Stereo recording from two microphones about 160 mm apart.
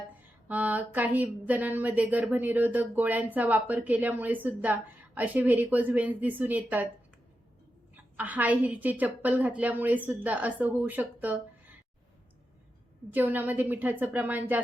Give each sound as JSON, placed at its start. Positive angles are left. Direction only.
{"t": 0.4, "sound": "speech", "side_deg": -10}
{"t": 8.1, "sound": "speech", "side_deg": -10}
{"t": 11.2, "sound": "a sound", "side_deg": -10}
{"t": 13.1, "sound": "speech", "side_deg": -10}